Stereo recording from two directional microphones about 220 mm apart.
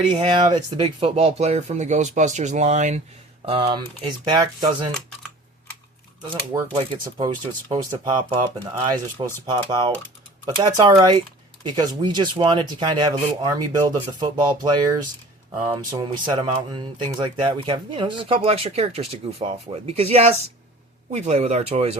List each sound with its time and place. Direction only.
0.1 s speech: 20° right (ahead or behind)
6.7 s speech: 15° right (ahead or behind)